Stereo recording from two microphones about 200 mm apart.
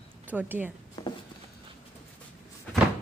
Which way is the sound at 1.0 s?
20° left (ahead or behind).